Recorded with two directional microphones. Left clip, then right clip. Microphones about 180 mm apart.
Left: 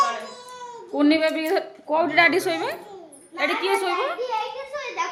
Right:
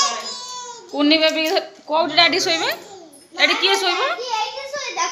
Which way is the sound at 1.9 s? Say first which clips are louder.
Right 3 dB; 25° left (ahead or behind).